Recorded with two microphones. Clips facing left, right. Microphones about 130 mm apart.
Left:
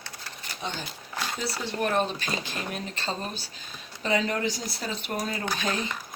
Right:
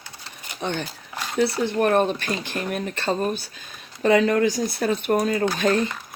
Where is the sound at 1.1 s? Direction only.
10° right (ahead or behind).